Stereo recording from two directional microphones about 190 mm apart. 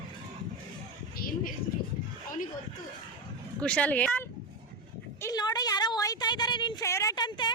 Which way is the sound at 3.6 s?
5° left (ahead or behind).